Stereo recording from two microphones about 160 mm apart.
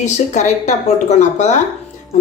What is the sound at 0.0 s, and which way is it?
A woman's voice, 45° left (ahead or behind).